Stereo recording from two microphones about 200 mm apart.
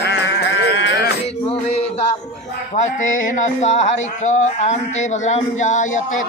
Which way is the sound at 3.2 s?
35° left (ahead or behind).